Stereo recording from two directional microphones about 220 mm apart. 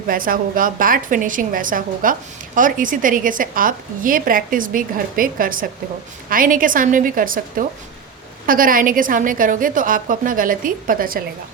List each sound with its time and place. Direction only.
0.1 s a woman's voice: 40° right (ahead or behind)